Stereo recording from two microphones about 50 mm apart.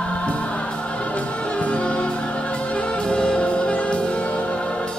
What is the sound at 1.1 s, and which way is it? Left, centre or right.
Music, left.